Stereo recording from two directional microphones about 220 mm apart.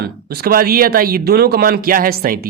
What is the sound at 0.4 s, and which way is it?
Speech, 40° right (ahead or behind).